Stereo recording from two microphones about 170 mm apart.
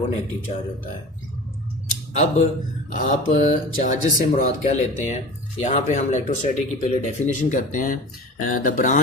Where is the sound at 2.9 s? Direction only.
45° left (ahead or behind).